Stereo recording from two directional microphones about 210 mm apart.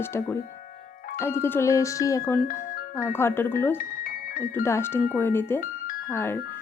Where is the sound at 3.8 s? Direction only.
40° left (ahead or behind).